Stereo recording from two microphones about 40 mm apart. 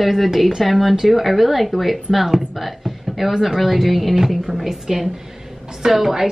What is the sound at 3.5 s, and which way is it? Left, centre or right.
A woman's voice, centre.